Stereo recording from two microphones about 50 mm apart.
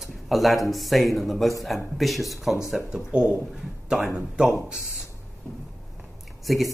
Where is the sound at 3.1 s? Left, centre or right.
Right.